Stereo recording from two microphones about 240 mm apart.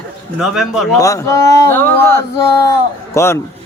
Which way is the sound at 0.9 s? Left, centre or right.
Centre.